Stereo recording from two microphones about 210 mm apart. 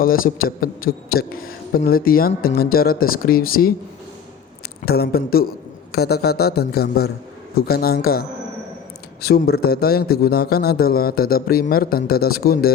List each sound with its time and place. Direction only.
0.0 s a man's voice: 45° left (ahead or behind)
4.9 s a man's voice: 50° left (ahead or behind)
9.2 s a man's voice: 45° left (ahead or behind)